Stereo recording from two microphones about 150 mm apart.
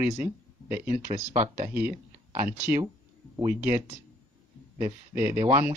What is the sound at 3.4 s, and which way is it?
Speech, 15° right (ahead or behind).